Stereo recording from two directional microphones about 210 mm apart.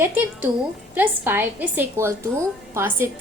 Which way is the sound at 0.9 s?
10° right (ahead or behind).